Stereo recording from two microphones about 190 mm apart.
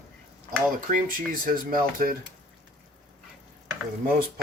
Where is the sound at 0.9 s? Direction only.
45° right (ahead or behind).